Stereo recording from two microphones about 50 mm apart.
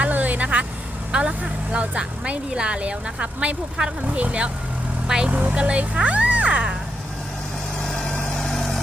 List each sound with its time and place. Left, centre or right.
0.0 s vehicle: right
1.1 s speech: right
5.0 s speech: centre
5.3 s speech: right
8.4 s vehicle: centre